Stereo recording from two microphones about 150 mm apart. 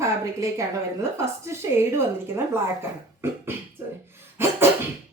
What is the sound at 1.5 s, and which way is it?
Speech, 15° right (ahead or behind).